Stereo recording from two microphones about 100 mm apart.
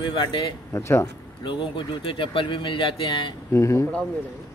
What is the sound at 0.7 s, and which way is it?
Speech, 30° left (ahead or behind).